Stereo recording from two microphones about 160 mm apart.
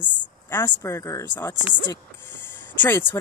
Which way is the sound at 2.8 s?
10° left (ahead or behind).